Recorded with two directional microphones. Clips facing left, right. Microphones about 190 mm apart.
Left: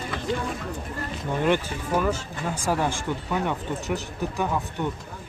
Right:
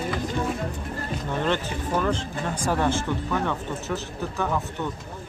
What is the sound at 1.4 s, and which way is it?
Speech, 10° left (ahead or behind).